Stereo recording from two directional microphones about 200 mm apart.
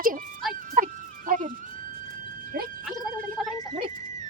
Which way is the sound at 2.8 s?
Centre (ahead or behind).